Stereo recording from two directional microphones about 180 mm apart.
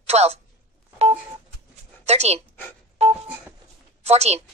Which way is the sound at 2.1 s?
35° right (ahead or behind).